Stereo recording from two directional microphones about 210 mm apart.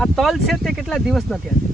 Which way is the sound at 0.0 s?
Centre (ahead or behind).